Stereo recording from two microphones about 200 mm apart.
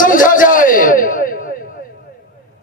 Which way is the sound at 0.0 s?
40° left (ahead or behind).